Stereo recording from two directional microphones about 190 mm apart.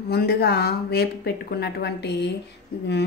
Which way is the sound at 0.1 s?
55° left (ahead or behind).